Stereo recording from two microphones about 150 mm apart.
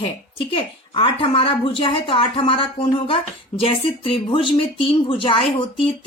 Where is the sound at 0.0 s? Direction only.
35° left (ahead or behind).